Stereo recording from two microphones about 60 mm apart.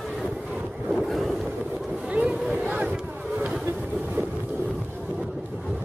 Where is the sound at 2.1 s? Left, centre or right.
Centre.